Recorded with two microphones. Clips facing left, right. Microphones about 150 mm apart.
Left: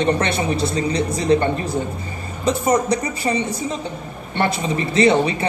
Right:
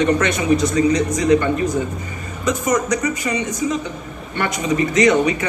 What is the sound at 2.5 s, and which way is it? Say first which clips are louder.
A woman's voice: left 1 dB; 30° left (ahead or behind).